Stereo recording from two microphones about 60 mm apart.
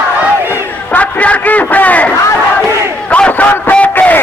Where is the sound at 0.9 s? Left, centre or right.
Left.